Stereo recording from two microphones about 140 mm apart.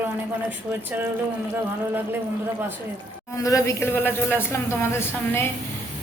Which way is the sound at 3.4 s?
25° left (ahead or behind).